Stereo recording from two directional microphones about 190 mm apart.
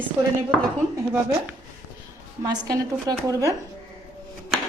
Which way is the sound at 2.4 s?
20° right (ahead or behind).